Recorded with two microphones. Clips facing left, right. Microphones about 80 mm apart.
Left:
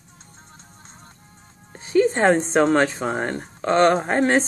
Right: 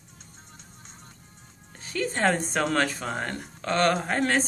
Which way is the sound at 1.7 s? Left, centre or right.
Left.